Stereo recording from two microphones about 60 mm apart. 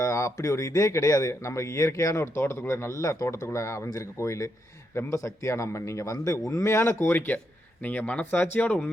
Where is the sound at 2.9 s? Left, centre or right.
Left.